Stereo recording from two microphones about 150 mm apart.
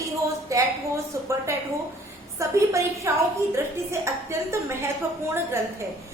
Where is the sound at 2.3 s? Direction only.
20° right (ahead or behind).